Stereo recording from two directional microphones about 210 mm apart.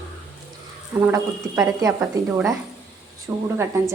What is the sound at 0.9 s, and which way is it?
A woman's voice, 15° right (ahead or behind).